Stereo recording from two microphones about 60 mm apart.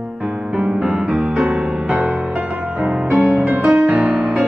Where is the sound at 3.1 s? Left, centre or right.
Centre.